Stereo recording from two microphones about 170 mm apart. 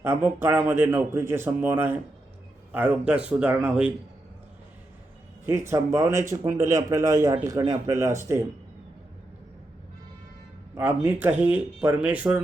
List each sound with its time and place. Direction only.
0.0 s speech: 10° right (ahead or behind)
5.5 s speech: 15° right (ahead or behind)
10.8 s speech: 10° right (ahead or behind)